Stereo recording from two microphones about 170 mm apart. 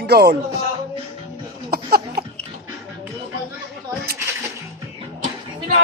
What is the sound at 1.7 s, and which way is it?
Cough, 65° right (ahead or behind).